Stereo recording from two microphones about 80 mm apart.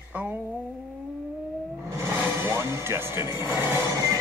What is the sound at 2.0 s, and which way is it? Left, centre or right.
Blender, right.